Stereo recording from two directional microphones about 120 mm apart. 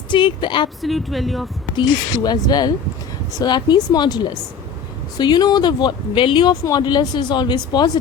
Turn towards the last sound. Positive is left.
turn(degrees=35)  # may be behind; listen again after turning